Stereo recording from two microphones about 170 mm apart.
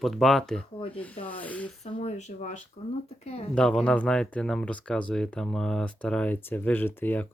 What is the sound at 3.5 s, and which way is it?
Speech, 5° left (ahead or behind).